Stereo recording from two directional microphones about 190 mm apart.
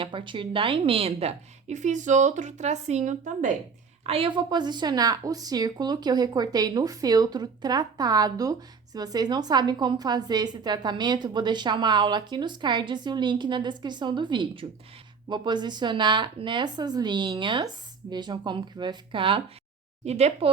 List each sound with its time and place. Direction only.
0.0 s a woman's voice: 25° right (ahead or behind); by 3.5 s 40° right (ahead or behind)
4.0 s a woman's voice: 30° right (ahead or behind)